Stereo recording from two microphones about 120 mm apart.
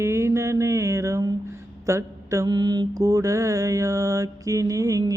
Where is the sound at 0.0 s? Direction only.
25° right (ahead or behind).